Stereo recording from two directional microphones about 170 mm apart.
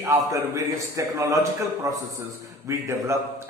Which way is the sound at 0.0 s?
15° right (ahead or behind).